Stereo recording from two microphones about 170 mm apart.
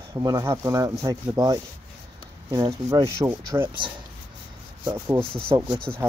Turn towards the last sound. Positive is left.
turn(degrees=-15)  # may be behind; listen again after turning